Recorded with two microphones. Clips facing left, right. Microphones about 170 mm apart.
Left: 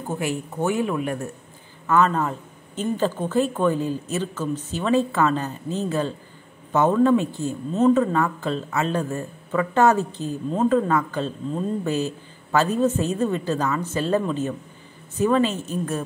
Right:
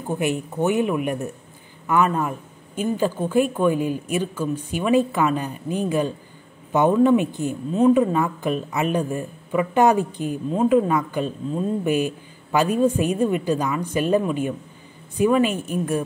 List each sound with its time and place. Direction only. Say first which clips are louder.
0.1 s speech: right 3 dB; 20° right (ahead or behind)